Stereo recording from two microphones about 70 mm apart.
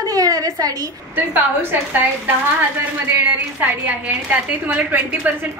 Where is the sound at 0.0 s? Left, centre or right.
Right.